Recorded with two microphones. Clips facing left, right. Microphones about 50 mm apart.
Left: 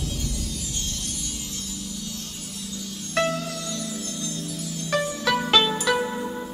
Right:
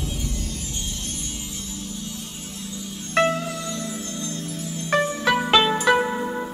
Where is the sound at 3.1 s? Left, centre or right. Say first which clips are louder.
Right 4 dB; right.